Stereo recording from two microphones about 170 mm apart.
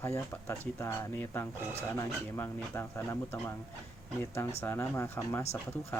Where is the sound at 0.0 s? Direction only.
15° left (ahead or behind).